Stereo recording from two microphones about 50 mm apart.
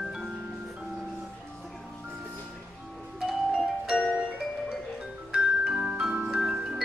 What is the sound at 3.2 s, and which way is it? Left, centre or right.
Music, centre.